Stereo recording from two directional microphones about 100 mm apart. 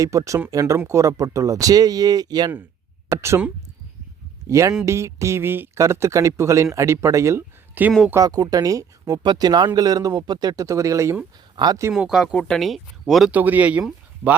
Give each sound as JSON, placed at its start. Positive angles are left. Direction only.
{"t": 0.0, "sound": "speech", "side_deg": -35}
{"t": 3.1, "sound": "speech", "side_deg": -30}
{"t": 4.4, "sound": "a man's voice", "side_deg": -30}
{"t": 8.1, "sound": "speech", "side_deg": -40}
{"t": 9.2, "sound": "speech", "side_deg": -45}
{"t": 11.5, "sound": "speech", "side_deg": -45}
{"t": 11.9, "sound": "speech", "side_deg": -5}
{"t": 13.3, "sound": "speech", "side_deg": -15}